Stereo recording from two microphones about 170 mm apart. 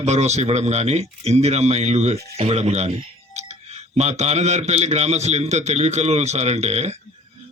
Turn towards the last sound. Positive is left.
turn(degrees=-40)  # may be behind; listen again after turning